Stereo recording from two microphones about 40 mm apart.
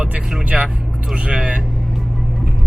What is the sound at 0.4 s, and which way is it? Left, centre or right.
Vehicle, right.